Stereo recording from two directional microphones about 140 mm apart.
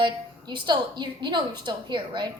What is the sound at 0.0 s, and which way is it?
A woman's voice, 35° right (ahead or behind).